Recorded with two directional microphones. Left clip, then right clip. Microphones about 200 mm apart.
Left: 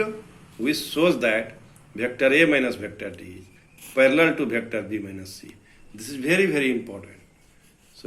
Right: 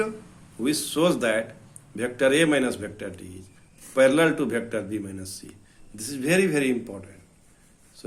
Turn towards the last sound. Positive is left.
turn(degrees=-55)  # may be behind; listen again after turning